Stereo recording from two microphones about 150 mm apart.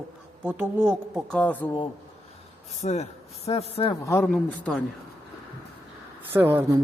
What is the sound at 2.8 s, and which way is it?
Speech, 50° left (ahead or behind).